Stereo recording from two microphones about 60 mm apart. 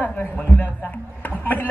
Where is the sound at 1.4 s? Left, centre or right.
Left.